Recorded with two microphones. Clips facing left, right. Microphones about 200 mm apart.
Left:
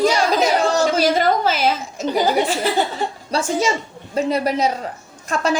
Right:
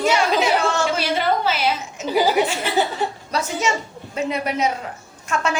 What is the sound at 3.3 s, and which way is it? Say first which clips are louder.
A man's voice: left 4 dB; 30° left (ahead or behind).